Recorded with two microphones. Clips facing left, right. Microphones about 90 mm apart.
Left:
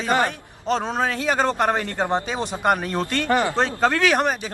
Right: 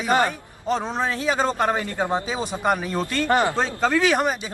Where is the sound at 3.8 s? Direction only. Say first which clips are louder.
Even; centre (ahead or behind).